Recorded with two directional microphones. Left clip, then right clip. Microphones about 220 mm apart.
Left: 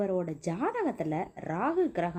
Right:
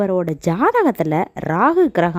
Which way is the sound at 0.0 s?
45° right (ahead or behind).